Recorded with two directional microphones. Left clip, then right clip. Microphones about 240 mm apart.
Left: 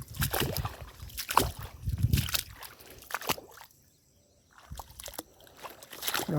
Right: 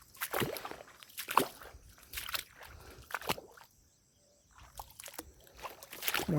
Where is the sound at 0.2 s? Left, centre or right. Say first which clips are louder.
Left 4 dB; left.